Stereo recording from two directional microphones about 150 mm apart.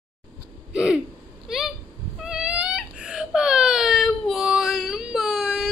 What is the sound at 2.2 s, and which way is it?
Baby cry, 5° right (ahead or behind).